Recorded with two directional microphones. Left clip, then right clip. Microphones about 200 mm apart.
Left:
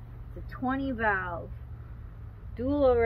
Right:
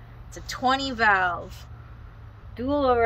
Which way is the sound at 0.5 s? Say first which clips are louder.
Right 8 dB; 80° right.